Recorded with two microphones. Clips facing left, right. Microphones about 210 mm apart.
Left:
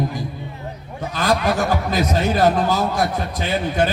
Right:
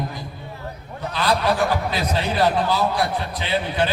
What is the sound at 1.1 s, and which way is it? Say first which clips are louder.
A man's voice: left 2 dB; 45° left (ahead or behind).